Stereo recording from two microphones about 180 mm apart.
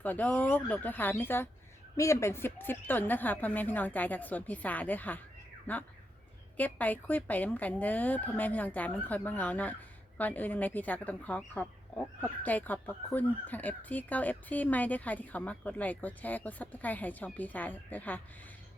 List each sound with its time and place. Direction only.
0.0 s speech: 10° left (ahead or behind)